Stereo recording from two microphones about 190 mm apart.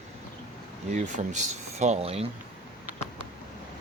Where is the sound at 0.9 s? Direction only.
40° right (ahead or behind).